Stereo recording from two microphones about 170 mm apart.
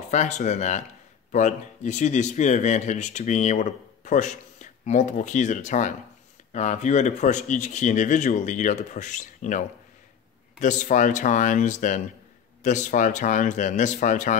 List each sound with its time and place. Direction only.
0.1 s speech: 45° left (ahead or behind)
10.6 s speech: 45° left (ahead or behind)